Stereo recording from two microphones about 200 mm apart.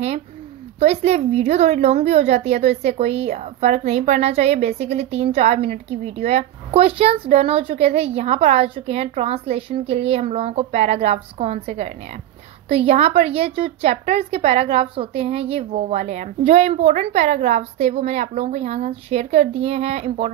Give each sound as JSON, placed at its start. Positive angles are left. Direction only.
{"t": 0.7, "sound": "a woman's voice", "side_deg": -30}